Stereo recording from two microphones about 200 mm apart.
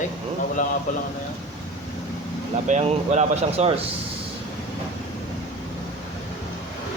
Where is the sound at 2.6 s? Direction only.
35° right (ahead or behind).